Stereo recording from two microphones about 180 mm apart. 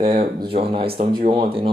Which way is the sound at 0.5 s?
30° right (ahead or behind).